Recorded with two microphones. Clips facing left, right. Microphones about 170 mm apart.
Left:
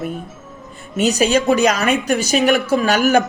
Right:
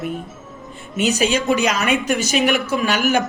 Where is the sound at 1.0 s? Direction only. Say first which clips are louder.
Left 3 dB; 40° left (ahead or behind).